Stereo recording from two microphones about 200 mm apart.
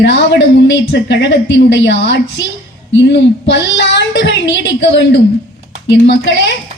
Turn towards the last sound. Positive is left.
turn(degrees=60)  # may be behind; listen again after turning